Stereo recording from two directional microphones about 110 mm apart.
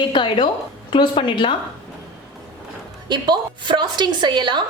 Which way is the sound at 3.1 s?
45° right (ahead or behind).